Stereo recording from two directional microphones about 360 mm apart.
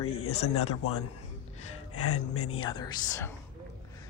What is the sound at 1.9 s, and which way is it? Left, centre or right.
Speech, left.